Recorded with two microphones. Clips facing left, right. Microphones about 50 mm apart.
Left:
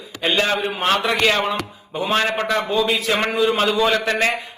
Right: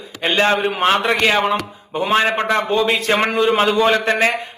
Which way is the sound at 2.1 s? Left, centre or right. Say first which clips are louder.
Right 3 dB; centre.